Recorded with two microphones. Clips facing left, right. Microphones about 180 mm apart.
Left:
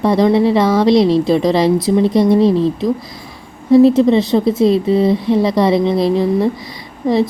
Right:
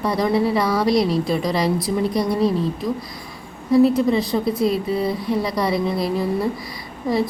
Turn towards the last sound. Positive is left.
turn(degrees=25)  # may be behind; listen again after turning